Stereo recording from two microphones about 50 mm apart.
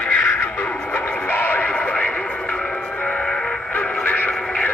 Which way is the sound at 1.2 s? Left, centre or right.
Left.